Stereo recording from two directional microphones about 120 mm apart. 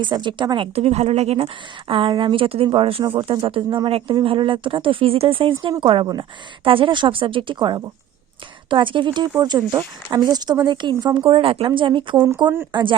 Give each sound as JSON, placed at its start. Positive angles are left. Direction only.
{"t": 0.0, "sound": "speech", "side_deg": -40}
{"t": 0.8, "sound": "speech", "side_deg": -60}
{"t": 1.9, "sound": "speech", "side_deg": -45}
{"t": 12.1, "sound": "speech", "side_deg": -25}
{"t": 12.7, "sound": "speech", "side_deg": -40}